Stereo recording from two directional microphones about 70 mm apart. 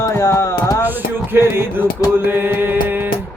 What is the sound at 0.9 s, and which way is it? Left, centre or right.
Music, right.